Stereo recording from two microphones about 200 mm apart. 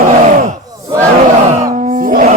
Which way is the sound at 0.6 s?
15° right (ahead or behind).